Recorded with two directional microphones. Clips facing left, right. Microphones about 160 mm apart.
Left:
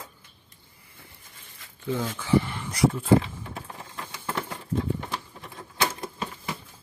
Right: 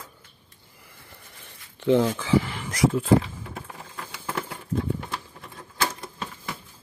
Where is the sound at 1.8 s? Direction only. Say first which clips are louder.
Right 9 dB; 90° right.